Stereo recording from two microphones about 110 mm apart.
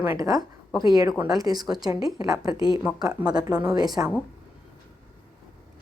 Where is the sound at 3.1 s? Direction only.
10° right (ahead or behind).